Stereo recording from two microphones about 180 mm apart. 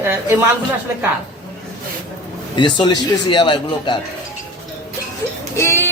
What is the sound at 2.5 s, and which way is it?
A woman's voice, 25° left (ahead or behind).